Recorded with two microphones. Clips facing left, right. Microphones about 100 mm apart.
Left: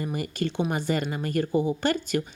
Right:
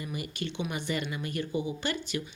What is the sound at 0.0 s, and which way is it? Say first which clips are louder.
Speech: left 7 dB; 45° left (ahead or behind).